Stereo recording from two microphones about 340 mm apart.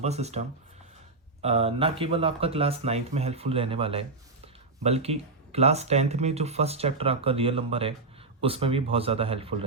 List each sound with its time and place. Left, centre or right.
0.0 s speech: centre